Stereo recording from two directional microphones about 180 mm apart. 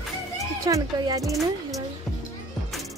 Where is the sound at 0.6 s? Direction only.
20° right (ahead or behind).